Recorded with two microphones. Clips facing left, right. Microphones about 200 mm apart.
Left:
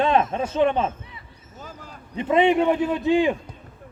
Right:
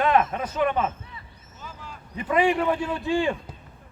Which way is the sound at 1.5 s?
45° left (ahead or behind).